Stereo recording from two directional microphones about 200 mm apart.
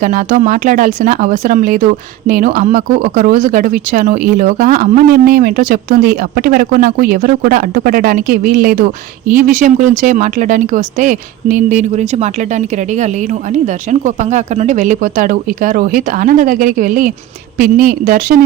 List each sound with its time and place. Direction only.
0.0 s speech: 40° right (ahead or behind)